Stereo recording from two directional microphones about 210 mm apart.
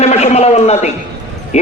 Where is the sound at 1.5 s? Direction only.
30° left (ahead or behind).